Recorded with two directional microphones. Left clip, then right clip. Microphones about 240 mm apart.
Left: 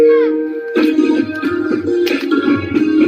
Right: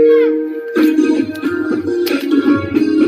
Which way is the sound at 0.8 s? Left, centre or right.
Right.